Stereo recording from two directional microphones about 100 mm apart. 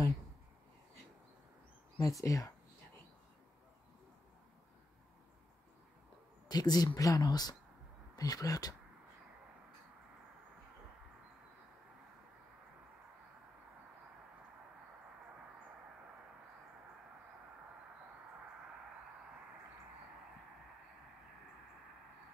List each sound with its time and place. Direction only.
2.0 s speech: 35° left (ahead or behind)
6.5 s speech: 40° left (ahead or behind)